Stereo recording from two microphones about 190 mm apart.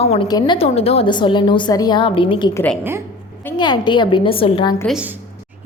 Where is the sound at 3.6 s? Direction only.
25° left (ahead or behind).